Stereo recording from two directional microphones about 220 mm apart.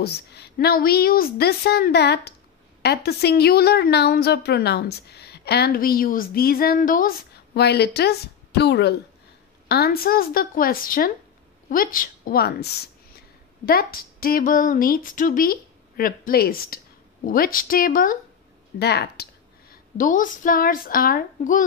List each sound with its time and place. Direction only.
0.0 s a woman's voice: 50° left (ahead or behind)
20.0 s speech: 35° left (ahead or behind)